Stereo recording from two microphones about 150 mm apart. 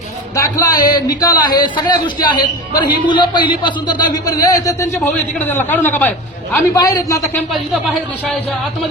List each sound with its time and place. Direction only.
0.3 s a man's voice: 20° left (ahead or behind)
6.7 s a man's voice: 25° left (ahead or behind)